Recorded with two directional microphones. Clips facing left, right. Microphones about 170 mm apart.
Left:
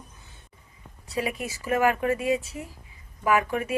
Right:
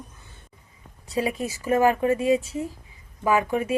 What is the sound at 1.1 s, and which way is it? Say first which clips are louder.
Speech: right 4 dB; 30° right (ahead or behind).